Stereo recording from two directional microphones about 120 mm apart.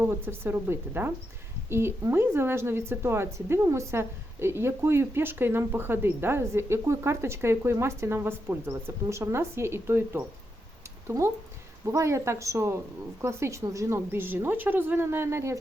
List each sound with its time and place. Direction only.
0.0 s speech: 20° right (ahead or behind)
11.9 s speech: 25° right (ahead or behind)